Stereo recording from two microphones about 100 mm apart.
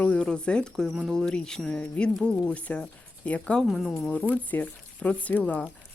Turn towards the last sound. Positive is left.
turn(degrees=15)  # may be behind; listen again after turning